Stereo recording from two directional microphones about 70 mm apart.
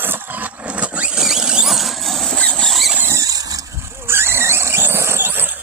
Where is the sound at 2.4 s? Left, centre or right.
Centre.